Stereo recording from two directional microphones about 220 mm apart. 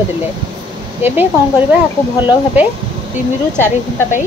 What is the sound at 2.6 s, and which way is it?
Speech, 10° right (ahead or behind).